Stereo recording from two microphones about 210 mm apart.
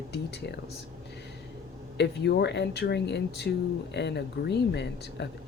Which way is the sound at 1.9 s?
55° left (ahead or behind).